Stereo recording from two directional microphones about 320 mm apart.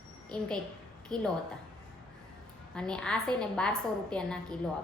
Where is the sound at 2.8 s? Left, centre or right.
Centre.